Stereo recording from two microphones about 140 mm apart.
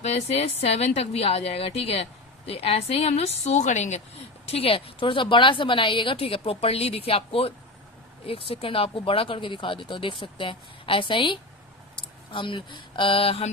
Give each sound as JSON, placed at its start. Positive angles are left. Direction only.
{"t": 0.0, "sound": "a woman's voice", "side_deg": 50}
{"t": 4.5, "sound": "speech", "side_deg": 40}